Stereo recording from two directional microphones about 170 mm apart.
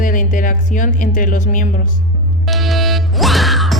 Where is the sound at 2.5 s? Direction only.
Centre (ahead or behind).